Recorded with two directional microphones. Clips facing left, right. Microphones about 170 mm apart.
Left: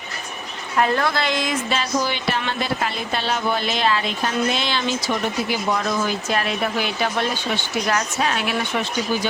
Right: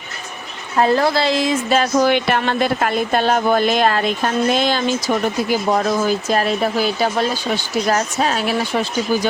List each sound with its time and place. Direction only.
0.8 s a woman's voice: 30° right (ahead or behind)
1.7 s speech: 55° right (ahead or behind); by 8.9 s 35° right (ahead or behind)